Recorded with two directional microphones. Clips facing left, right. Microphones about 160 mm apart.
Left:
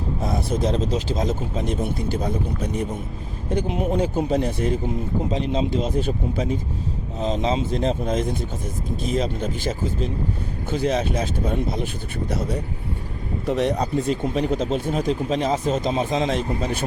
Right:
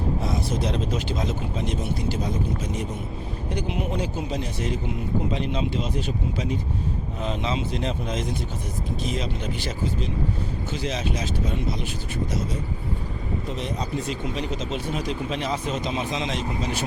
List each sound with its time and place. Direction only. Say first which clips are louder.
0.2 s speech: left 3 dB; 50° left (ahead or behind)
3.5 s speech: left 6 dB; 45° left (ahead or behind)
5.3 s speech: left 4 dB; 35° left (ahead or behind)
12.3 s speech: left 3 dB; 65° left (ahead or behind)